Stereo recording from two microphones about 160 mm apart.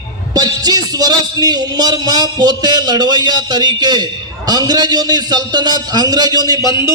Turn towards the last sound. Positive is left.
turn(degrees=25)  # may be behind; listen again after turning